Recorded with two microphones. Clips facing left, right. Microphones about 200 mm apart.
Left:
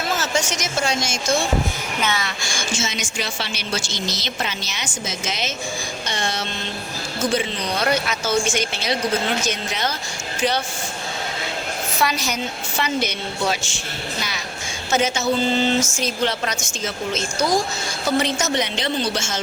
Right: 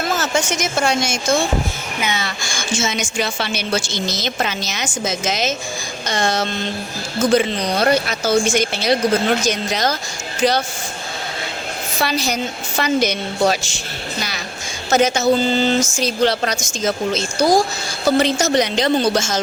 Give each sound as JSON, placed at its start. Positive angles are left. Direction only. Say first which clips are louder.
{"t": 0.2, "sound": "speech", "louder": "right 4 dB", "side_deg": -55}
{"t": 2.8, "sound": "a woman's voice", "louder": "right 6 dB", "side_deg": -50}
{"t": 11.9, "sound": "speech", "louder": "right 3 dB", "side_deg": -30}